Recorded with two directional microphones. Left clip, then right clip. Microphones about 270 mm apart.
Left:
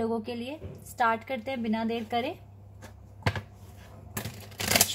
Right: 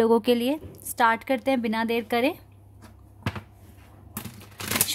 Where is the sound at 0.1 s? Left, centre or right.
Right.